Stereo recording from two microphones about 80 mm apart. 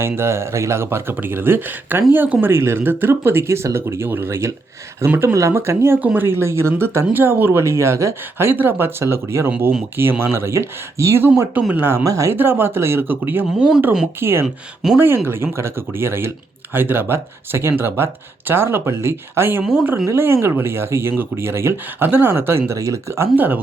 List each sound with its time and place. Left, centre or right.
0.0 s speech: right
7.6 s speech: right
12.0 s speech: right
12.3 s speech: right
13.6 s speech: centre
14.2 s speech: right
14.4 s speech: centre
14.9 s speech: right
23.3 s speech: right